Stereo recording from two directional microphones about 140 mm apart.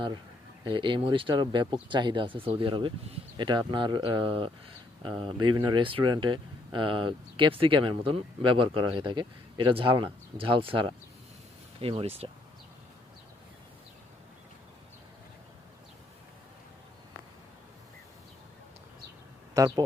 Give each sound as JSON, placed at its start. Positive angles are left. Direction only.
{"t": 0.6, "sound": "speech", "side_deg": -35}
{"t": 19.5, "sound": "speech", "side_deg": -25}